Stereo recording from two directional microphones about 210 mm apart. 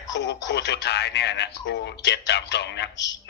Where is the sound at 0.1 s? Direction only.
55° left (ahead or behind).